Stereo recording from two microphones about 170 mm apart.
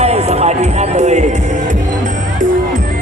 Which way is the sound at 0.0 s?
40° right (ahead or behind).